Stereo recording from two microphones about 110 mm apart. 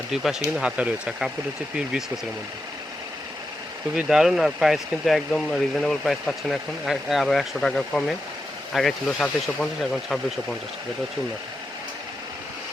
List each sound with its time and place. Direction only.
0.1 s speech: 5° right (ahead or behind)
3.9 s speech: 5° right (ahead or behind)